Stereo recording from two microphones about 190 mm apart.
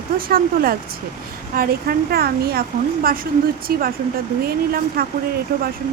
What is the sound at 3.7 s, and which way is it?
Speech, 50° right (ahead or behind).